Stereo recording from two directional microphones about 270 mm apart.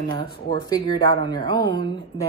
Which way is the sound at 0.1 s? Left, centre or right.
Centre.